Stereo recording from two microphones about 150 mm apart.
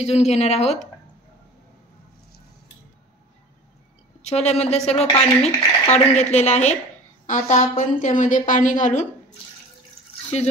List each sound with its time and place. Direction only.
0.0 s speech: 45° left (ahead or behind)
4.2 s a woman's voice: 45° left (ahead or behind)